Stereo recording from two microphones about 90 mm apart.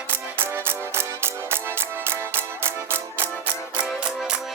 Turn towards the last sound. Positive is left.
turn(degrees=-10)  # may be behind; listen again after turning